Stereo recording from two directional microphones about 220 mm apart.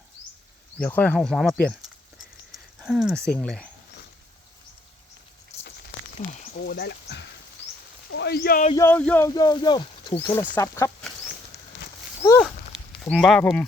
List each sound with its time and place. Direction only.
0.8 s speech: 5° left (ahead or behind)
2.8 s speech: centre (ahead or behind)
6.3 s speech: 40° left (ahead or behind)
8.7 s speech: 10° left (ahead or behind)
9.3 s speech: 20° left (ahead or behind)
13.0 s speech: 5° left (ahead or behind)